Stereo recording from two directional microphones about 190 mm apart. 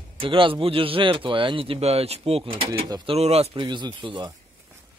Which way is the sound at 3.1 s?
35° right (ahead or behind).